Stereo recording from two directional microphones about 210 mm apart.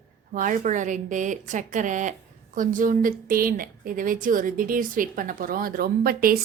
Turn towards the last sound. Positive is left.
turn(degrees=-45)  # may be behind; listen again after turning